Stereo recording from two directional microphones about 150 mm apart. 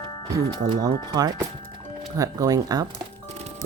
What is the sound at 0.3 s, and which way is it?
Speech, 25° right (ahead or behind).